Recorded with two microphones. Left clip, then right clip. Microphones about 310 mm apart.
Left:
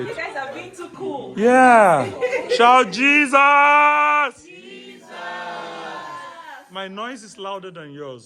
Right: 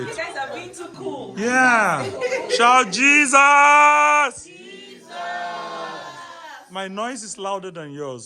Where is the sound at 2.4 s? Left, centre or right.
Centre.